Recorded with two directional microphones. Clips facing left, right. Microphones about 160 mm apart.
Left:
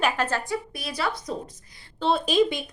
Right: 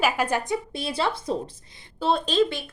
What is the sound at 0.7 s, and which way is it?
Speech, 25° right (ahead or behind).